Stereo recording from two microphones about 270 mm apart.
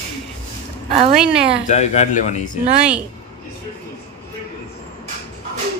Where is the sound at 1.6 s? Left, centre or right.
Left.